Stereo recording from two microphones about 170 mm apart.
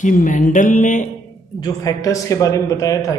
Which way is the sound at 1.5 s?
20° left (ahead or behind).